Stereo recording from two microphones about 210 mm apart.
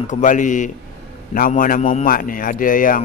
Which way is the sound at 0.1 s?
35° left (ahead or behind).